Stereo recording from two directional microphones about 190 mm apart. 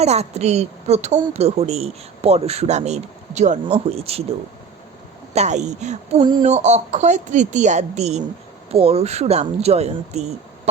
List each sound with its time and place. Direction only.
0.0 s a woman's voice: 35° right (ahead or behind)
5.3 s a woman's voice: 35° right (ahead or behind)
6.2 s speech: 25° right (ahead or behind)
6.5 s a woman's voice: 35° right (ahead or behind)